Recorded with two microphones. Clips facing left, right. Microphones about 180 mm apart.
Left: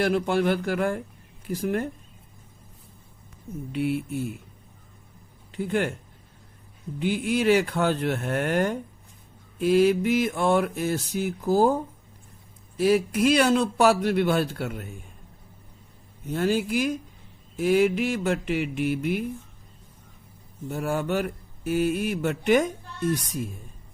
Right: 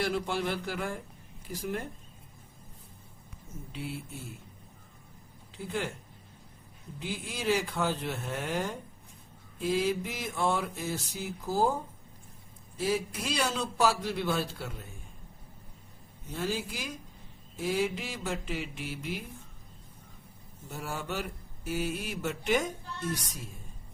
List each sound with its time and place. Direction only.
0.0 s speech: 60° left (ahead or behind)
3.7 s mantra: 70° left (ahead or behind)
5.5 s a man's voice: 65° left (ahead or behind)
7.0 s mantra: 70° left (ahead or behind)
12.7 s mantra: 70° left (ahead or behind)
16.3 s mantra: 65° left (ahead or behind)
17.6 s speech: 70° left (ahead or behind)
20.7 s speech: 60° left (ahead or behind)